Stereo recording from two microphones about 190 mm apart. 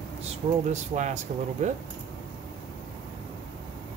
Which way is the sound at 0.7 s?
40° right (ahead or behind).